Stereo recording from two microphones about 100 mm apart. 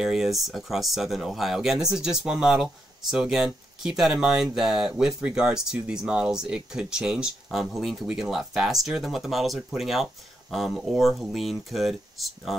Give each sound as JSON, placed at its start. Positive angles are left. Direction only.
{"t": 0.0, "sound": "speech", "side_deg": -5}